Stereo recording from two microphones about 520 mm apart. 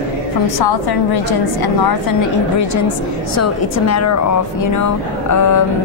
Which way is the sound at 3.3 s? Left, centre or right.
Left.